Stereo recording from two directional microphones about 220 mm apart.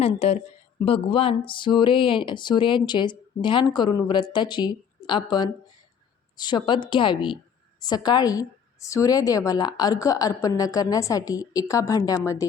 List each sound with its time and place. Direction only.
0.0 s a woman's voice: 25° left (ahead or behind)